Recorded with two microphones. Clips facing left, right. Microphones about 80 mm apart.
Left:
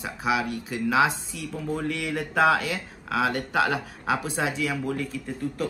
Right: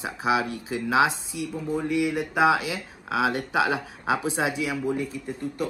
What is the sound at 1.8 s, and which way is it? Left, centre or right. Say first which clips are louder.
Speech: right 4 dB; centre.